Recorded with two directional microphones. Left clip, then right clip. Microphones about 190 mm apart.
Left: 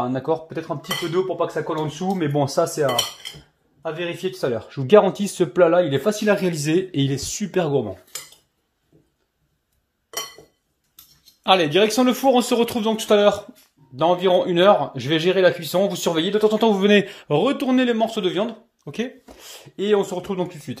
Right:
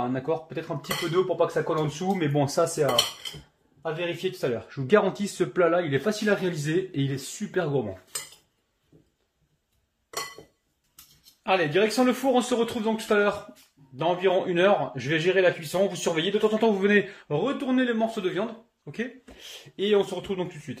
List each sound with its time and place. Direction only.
0.1 s a man's voice: 20° left (ahead or behind)
11.4 s a man's voice: 35° left (ahead or behind)